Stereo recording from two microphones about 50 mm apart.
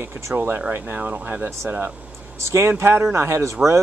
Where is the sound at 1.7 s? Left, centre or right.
Right.